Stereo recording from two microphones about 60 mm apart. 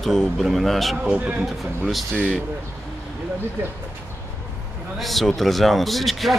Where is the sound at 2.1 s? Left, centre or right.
Left.